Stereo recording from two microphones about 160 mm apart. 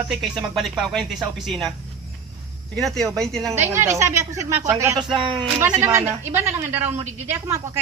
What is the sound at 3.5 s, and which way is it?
A woman's voice, 15° right (ahead or behind).